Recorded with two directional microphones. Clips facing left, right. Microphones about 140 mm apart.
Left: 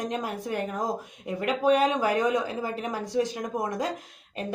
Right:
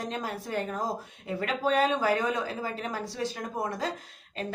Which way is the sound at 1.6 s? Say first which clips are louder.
Left 3 dB; 15° left (ahead or behind).